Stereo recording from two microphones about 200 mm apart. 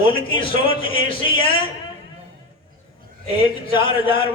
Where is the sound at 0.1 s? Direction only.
25° left (ahead or behind).